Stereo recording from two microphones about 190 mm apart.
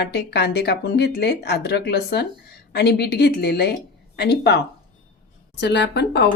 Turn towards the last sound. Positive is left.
turn(degrees=65)  # may be behind; listen again after turning